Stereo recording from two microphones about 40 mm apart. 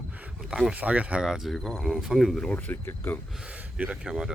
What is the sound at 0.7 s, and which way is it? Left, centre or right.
Speech, right.